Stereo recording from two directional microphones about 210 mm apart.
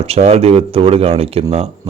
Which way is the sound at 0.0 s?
30° right (ahead or behind).